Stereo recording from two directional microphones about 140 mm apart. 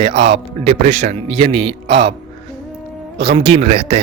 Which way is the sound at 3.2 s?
45° right (ahead or behind).